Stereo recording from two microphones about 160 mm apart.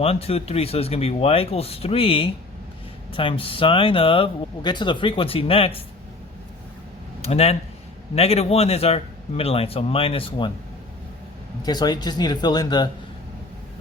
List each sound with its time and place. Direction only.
0.0 s speech: 40° left (ahead or behind)
7.2 s speech: 40° left (ahead or behind)
11.6 s speech: 25° left (ahead or behind)